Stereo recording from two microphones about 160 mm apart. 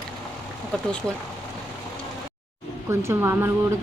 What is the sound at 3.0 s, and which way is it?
Speech, 15° right (ahead or behind).